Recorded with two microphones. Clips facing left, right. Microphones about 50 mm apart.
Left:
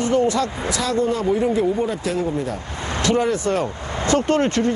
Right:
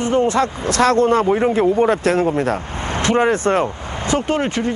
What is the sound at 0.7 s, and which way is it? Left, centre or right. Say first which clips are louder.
A man's voice: right 9 dB; right.